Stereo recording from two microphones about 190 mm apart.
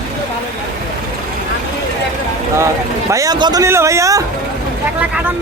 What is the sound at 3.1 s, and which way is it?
Speech, 20° right (ahead or behind).